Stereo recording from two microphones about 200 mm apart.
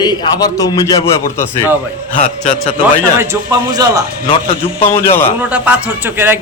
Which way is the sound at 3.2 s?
15° right (ahead or behind).